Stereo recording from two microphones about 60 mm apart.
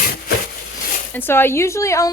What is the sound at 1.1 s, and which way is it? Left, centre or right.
A woman's voice, left.